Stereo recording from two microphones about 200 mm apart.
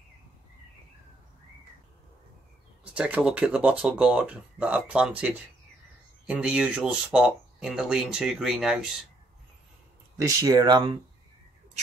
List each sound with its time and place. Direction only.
2.8 s speech: 5° right (ahead or behind)
10.1 s speech: 20° right (ahead or behind)